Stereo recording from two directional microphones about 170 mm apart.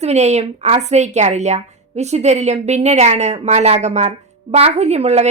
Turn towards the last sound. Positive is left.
turn(degrees=-40)  # may be behind; listen again after turning